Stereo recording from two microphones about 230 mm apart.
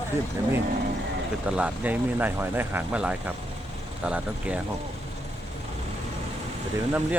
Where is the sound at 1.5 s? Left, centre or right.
Centre.